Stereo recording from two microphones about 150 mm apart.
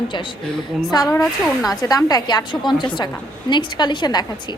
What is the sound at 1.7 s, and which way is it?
A woman's voice, 25° left (ahead or behind).